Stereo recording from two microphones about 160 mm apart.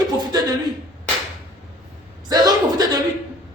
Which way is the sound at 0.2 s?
25° right (ahead or behind).